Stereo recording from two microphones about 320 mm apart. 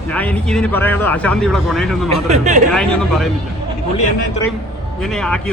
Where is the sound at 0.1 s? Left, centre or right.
Centre.